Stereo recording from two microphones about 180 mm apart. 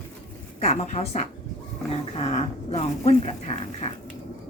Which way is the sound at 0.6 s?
35° left (ahead or behind).